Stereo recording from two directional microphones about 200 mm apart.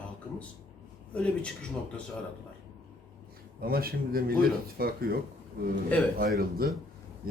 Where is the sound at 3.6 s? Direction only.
50° right (ahead or behind).